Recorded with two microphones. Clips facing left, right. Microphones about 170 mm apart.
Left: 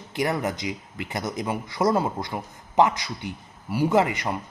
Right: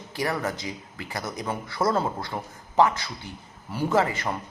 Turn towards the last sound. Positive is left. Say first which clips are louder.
# left 2 dB
turn(degrees=15)  # may be behind; listen again after turning